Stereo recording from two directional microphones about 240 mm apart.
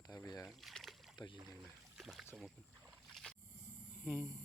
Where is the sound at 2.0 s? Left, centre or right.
Centre.